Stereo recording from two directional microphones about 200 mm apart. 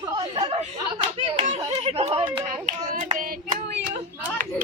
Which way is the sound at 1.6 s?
30° right (ahead or behind).